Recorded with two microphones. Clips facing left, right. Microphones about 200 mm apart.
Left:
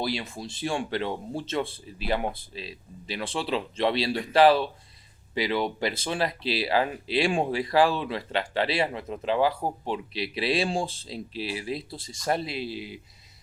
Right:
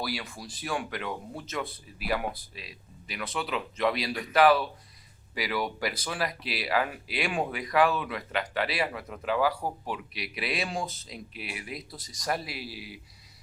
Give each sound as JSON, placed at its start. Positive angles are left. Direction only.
{"t": 0.0, "sound": "speech", "side_deg": 25}